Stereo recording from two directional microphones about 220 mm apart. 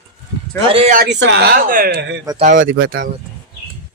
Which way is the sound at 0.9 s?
50° right (ahead or behind).